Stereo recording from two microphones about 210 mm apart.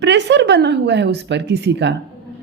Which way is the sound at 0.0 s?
55° right (ahead or behind).